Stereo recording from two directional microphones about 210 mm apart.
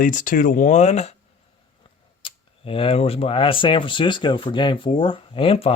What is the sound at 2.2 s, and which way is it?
Speech, 25° left (ahead or behind).